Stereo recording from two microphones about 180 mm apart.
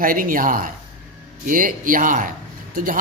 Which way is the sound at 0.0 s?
50° right (ahead or behind).